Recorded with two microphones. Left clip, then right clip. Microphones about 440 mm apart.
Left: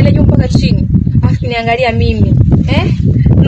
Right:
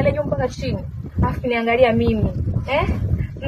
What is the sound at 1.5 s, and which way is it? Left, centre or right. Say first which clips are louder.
Speech: left 4 dB; centre.